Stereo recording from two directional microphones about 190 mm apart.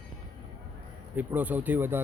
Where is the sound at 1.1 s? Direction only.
10° right (ahead or behind).